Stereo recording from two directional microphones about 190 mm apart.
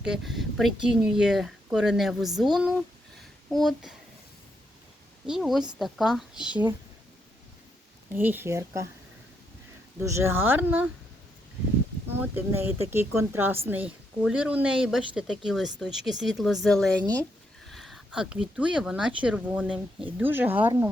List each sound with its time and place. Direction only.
0.0 s speech: centre (ahead or behind)
3.5 s speech: centre (ahead or behind)
5.2 s speech: centre (ahead or behind)
6.3 s speech: 25° left (ahead or behind)
8.1 s speech: 10° right (ahead or behind)
10.0 s speech: 15° right (ahead or behind)
12.2 s speech: 10° right (ahead or behind)